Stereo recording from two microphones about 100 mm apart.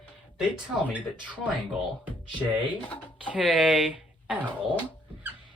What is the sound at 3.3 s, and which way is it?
Speech, 10° right (ahead or behind).